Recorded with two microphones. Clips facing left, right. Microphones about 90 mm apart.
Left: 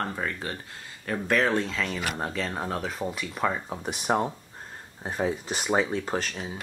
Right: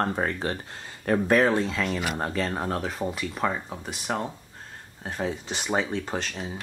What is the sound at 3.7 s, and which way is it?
Speech, 15° left (ahead or behind).